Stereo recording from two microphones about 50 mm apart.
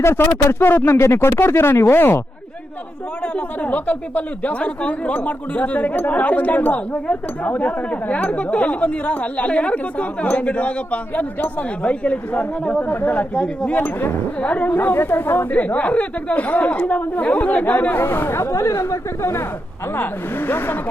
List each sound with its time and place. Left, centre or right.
0.0 s speech: left
0.3 s speech: left
3.3 s speech: left
12.9 s speech: left
13.7 s speech: left
14.8 s speech: left
18.0 s speech: left
20.0 s speech: left